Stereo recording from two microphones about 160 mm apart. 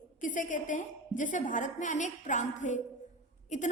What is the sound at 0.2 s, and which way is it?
A woman's voice, 55° left (ahead or behind).